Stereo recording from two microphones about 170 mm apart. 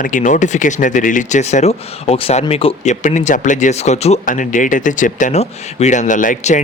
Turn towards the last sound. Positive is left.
turn(degrees=50)  # may be behind; listen again after turning